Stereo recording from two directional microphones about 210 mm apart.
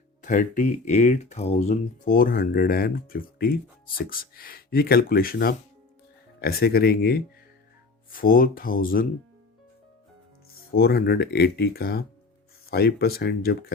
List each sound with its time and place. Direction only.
0.2 s speech: 40° left (ahead or behind)
10.7 s speech: 45° left (ahead or behind)